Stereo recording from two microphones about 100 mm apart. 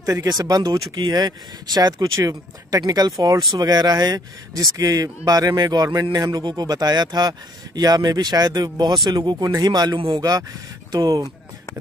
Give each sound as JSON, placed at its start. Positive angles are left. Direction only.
{"t": 0.0, "sound": "speech", "side_deg": -40}
{"t": 9.9, "sound": "speech", "side_deg": -60}
{"t": 10.9, "sound": "speech", "side_deg": -35}